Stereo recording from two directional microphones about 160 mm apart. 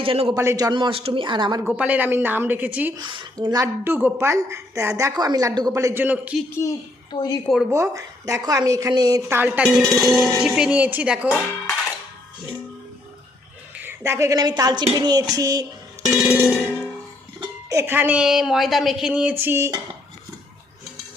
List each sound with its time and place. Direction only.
0.0 s a man's voice: 35° right (ahead or behind)
0.3 s a woman's voice: 20° right (ahead or behind)
1.6 s speech: 10° right (ahead or behind)
3.0 s a woman's voice: 30° right (ahead or behind); by 6.4 s 10° right (ahead or behind)
6.6 s a child's voice: 25° left (ahead or behind)
7.4 s speech: centre (ahead or behind)
7.7 s a woman's voice: 20° right (ahead or behind)
9.6 s speech: 10° left (ahead or behind)
13.7 s a woman's voice: 15° right (ahead or behind)
16.2 s speech: 10° right (ahead or behind)
17.4 s speech: 20° right (ahead or behind)